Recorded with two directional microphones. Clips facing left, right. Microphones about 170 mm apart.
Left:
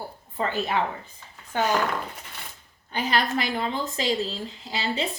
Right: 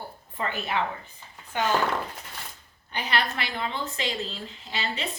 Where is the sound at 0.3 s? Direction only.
35° left (ahead or behind).